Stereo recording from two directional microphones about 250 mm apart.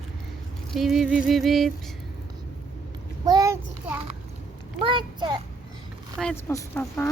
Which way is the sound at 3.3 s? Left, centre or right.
Centre.